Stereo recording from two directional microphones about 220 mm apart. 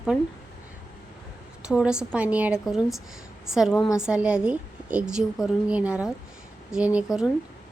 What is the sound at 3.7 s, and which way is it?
Speech, 15° left (ahead or behind).